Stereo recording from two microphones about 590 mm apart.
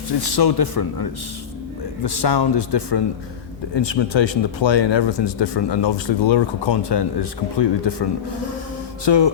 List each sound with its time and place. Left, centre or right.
0.2 s a man's voice: left
2.0 s a man's voice: left
9.0 s speech: left